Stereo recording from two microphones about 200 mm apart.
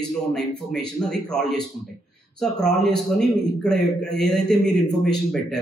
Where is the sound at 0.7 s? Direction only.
5° left (ahead or behind).